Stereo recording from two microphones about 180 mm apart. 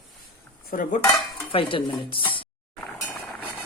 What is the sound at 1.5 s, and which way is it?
Stir, 30° left (ahead or behind).